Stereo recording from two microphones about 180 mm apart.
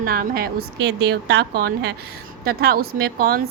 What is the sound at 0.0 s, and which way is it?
Speech, 55° right (ahead or behind).